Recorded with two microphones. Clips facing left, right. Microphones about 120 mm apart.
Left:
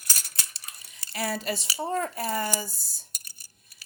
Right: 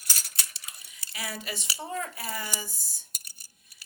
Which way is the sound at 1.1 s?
35° left (ahead or behind).